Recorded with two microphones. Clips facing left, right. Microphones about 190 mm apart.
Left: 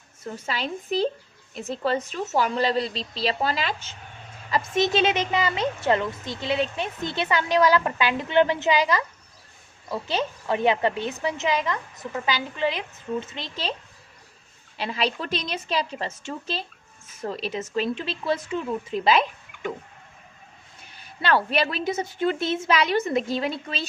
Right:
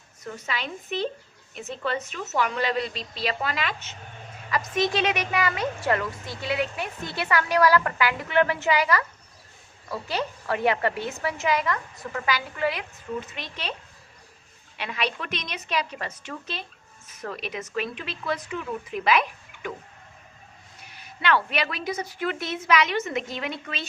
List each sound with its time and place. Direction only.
0.3 s a woman's voice: 30° left (ahead or behind)
14.8 s a woman's voice: 30° left (ahead or behind)
20.9 s a woman's voice: 35° left (ahead or behind)